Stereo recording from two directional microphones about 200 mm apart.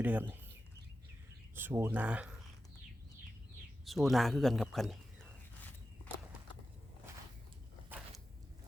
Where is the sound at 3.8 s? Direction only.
Centre (ahead or behind).